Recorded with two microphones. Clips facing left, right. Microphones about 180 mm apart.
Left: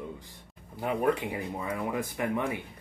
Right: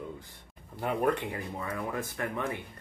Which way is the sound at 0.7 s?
5° left (ahead or behind).